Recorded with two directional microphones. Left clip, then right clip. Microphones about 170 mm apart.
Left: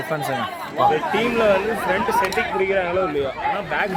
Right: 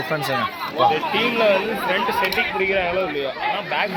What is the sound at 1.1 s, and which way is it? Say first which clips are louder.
A man's voice: even; 50° left (ahead or behind).